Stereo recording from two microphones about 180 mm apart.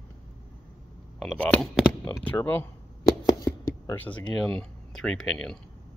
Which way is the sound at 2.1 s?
10° left (ahead or behind).